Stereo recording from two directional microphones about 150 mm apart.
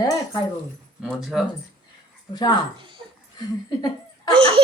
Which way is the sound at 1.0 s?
5° right (ahead or behind).